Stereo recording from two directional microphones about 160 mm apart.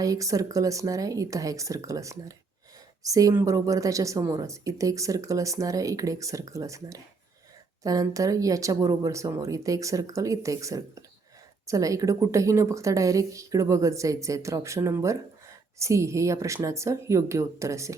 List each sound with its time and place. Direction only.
0.0 s a woman's voice: 20° right (ahead or behind)